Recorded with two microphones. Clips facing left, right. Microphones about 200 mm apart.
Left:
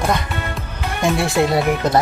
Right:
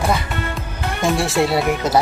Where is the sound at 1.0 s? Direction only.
Centre (ahead or behind).